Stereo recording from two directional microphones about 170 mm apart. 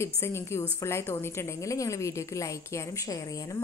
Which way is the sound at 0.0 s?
15° left (ahead or behind).